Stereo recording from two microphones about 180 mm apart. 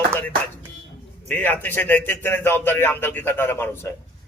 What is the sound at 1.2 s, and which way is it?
A man's voice, 10° left (ahead or behind).